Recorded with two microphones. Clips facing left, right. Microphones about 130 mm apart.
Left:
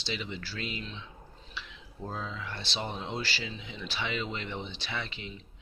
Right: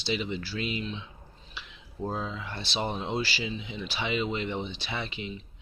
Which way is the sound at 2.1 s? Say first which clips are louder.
Right 3 dB; 20° right (ahead or behind).